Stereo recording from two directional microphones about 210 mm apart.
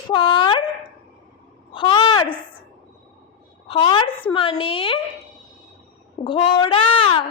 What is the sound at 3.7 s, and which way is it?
A child's voice, 25° left (ahead or behind).